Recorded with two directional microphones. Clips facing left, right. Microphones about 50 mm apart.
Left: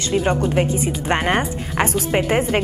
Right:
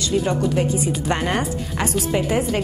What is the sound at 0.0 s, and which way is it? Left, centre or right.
Speech, left.